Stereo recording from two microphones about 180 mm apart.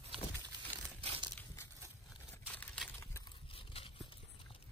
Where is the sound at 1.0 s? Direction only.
30° right (ahead or behind).